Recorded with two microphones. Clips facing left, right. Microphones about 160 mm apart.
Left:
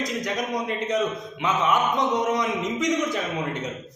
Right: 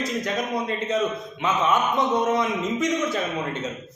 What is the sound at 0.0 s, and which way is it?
A man's voice, 15° left (ahead or behind).